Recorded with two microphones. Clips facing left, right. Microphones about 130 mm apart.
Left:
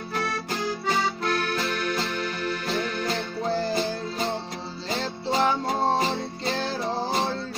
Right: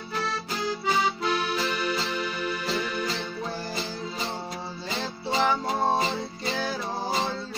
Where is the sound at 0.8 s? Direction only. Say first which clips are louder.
Right 1 dB; 10° right (ahead or behind).